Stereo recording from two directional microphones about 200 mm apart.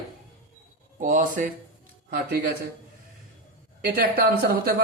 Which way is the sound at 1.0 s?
40° right (ahead or behind).